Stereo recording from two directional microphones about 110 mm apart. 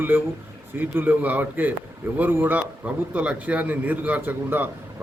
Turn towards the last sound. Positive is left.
turn(degrees=-15)  # may be behind; listen again after turning